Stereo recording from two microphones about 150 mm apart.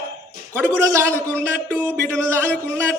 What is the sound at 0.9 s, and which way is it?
A man's voice, 20° right (ahead or behind).